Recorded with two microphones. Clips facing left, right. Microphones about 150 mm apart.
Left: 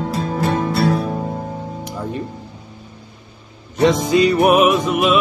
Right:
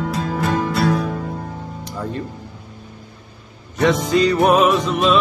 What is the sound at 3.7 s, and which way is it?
Music, 20° left (ahead or behind).